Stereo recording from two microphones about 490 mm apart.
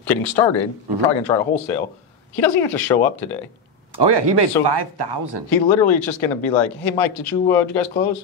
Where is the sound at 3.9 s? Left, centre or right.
Right.